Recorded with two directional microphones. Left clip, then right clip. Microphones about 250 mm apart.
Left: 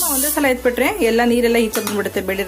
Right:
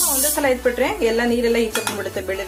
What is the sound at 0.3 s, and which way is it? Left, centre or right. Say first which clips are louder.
Speech: left 2 dB; left.